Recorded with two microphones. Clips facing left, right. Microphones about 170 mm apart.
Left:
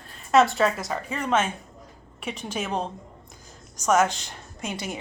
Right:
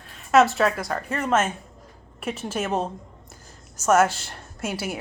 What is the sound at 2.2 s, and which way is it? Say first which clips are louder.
A woman's voice: right 3 dB; 5° right (ahead or behind).